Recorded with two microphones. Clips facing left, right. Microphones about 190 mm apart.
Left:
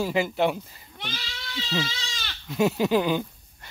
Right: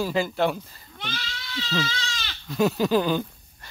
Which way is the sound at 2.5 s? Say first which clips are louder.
Right 1 dB; 20° left (ahead or behind).